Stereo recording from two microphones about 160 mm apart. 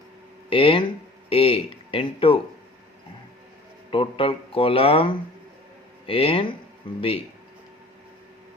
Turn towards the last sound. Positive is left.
turn(degrees=35)  # may be behind; listen again after turning